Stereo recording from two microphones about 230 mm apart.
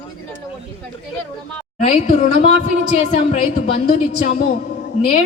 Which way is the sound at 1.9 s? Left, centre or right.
Left.